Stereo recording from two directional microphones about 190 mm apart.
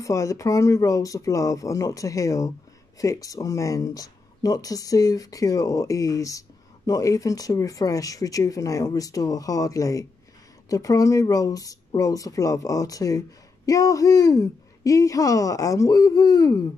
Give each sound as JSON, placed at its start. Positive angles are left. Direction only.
{"t": 0.0, "sound": "speech", "side_deg": 15}